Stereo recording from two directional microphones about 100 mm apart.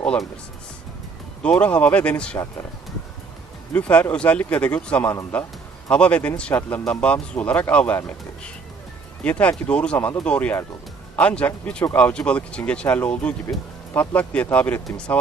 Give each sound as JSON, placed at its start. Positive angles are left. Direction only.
{"t": 0.0, "sound": "speech", "side_deg": 10}
{"t": 1.4, "sound": "speech", "side_deg": 10}
{"t": 3.7, "sound": "speech", "side_deg": 15}
{"t": 9.2, "sound": "speech", "side_deg": 15}